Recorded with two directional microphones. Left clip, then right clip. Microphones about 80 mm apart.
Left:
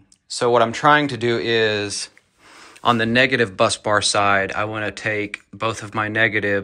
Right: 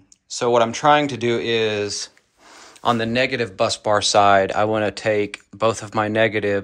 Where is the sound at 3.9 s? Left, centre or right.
Right.